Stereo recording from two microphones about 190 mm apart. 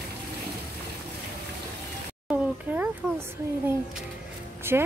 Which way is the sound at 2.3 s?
10° right (ahead or behind).